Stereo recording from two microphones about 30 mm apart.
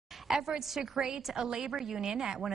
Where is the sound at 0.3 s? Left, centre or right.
Centre.